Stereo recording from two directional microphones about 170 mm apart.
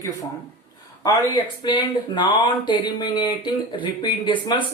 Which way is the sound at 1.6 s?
25° left (ahead or behind).